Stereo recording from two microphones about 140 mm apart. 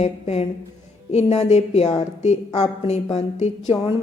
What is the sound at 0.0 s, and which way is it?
A woman's voice, 50° left (ahead or behind).